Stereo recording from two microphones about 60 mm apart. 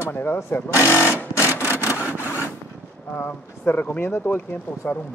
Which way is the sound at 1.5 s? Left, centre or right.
Left.